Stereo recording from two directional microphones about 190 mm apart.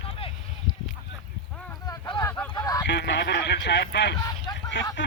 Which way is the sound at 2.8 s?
65° left (ahead or behind).